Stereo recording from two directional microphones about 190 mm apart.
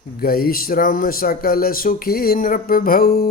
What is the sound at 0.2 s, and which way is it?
Speech, 50° left (ahead or behind).